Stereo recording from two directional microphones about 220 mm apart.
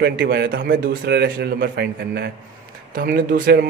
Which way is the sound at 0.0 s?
45° right (ahead or behind).